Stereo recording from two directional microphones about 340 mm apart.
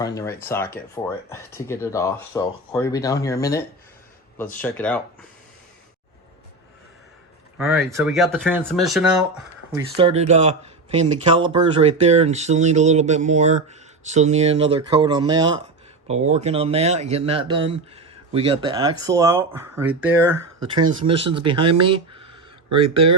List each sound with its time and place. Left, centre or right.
0.0 s speech: centre
7.6 s speech: centre
10.0 s speech: centre
21.0 s speech: centre